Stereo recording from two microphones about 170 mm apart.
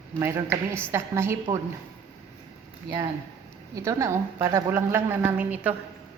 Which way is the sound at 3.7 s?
15° right (ahead or behind).